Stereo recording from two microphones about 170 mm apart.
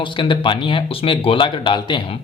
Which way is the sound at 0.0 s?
30° left (ahead or behind).